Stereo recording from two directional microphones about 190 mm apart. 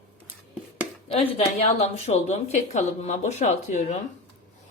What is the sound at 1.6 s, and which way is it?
Speech, 35° left (ahead or behind).